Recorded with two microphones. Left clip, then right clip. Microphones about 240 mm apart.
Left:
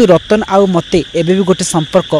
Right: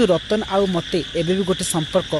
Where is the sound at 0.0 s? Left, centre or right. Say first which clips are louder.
Left 9 dB; left.